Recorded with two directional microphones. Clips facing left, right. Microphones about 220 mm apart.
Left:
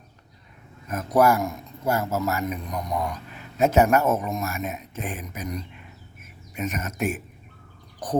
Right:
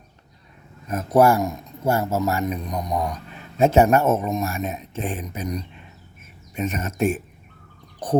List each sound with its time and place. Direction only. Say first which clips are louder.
0.9 s a man's voice: right 3 dB; 30° right (ahead or behind)